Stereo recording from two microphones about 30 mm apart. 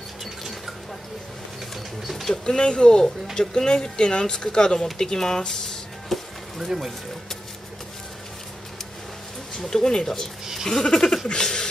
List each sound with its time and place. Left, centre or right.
2.4 s speech: left
6.1 s speech: centre
6.6 s speech: centre
9.7 s speech: left